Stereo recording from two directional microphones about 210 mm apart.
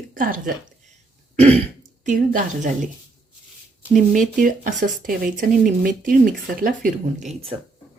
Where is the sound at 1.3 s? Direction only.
30° right (ahead or behind).